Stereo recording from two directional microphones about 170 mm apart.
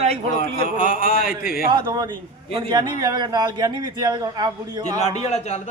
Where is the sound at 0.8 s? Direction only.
55° left (ahead or behind).